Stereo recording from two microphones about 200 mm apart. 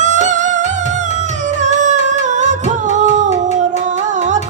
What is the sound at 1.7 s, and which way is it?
Music, 35° right (ahead or behind).